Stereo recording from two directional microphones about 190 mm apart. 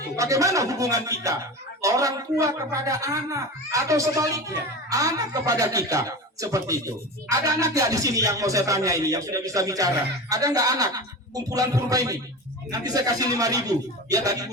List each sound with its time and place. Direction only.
0.2 s speech: 15° right (ahead or behind)